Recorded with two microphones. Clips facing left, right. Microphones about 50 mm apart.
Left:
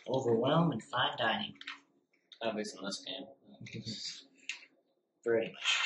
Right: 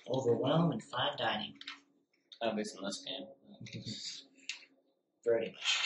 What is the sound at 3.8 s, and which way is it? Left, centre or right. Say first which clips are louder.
Speech: left 2 dB; centre.